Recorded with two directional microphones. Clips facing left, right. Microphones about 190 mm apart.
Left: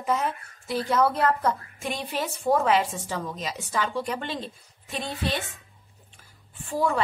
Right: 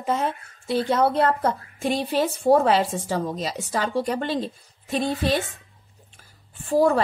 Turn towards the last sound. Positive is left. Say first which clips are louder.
# right 7 dB
turn(degrees=-40)  # may be behind; listen again after turning